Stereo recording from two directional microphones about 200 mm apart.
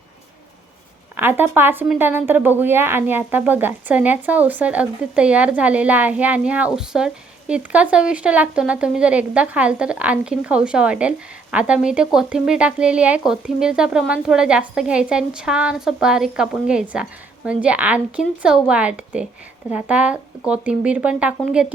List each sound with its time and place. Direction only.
1.1 s speech: 10° right (ahead or behind)